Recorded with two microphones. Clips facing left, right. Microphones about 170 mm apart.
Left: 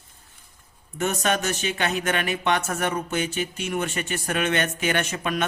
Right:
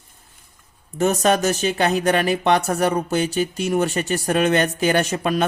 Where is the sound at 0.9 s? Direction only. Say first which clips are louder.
Right 6 dB; 35° right (ahead or behind).